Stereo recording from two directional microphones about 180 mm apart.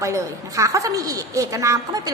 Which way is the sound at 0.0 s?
15° right (ahead or behind).